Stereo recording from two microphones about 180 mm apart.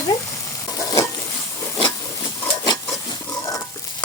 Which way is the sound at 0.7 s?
20° left (ahead or behind).